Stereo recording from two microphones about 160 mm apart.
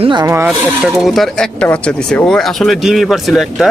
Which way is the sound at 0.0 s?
30° right (ahead or behind).